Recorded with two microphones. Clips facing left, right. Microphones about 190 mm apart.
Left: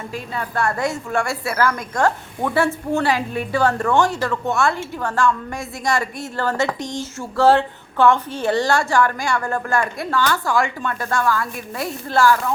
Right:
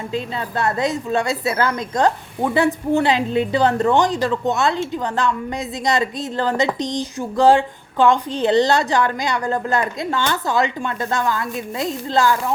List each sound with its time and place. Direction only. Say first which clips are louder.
0.1 s a woman's voice: right 3 dB; 20° right (ahead or behind)